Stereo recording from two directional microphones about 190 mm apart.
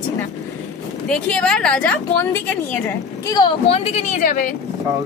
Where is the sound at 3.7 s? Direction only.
35° left (ahead or behind).